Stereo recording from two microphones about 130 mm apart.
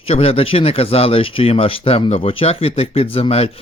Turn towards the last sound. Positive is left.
turn(degrees=50)  # may be behind; listen again after turning